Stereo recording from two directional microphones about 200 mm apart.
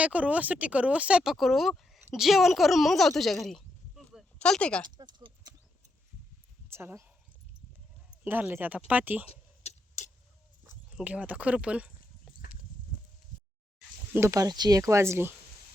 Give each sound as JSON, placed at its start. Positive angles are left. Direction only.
{"t": 0.0, "sound": "speech", "side_deg": -5}
{"t": 3.4, "sound": "a sound", "side_deg": 0}
{"t": 4.9, "sound": "speech", "side_deg": -20}
{"t": 6.7, "sound": "speech", "side_deg": -10}
{"t": 8.2, "sound": "speech", "side_deg": -10}
{"t": 9.2, "sound": "a sound", "side_deg": 30}
{"t": 10.9, "sound": "speech", "side_deg": -5}
{"t": 14.1, "sound": "speech", "side_deg": -15}